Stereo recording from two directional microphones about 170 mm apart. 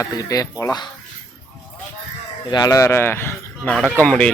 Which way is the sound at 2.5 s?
20° left (ahead or behind).